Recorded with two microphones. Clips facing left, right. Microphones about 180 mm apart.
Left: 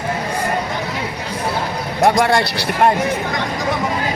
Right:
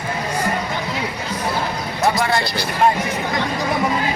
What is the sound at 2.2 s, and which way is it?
Speech, 65° left (ahead or behind).